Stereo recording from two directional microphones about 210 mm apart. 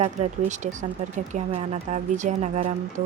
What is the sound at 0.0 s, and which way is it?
A woman's voice, 35° right (ahead or behind).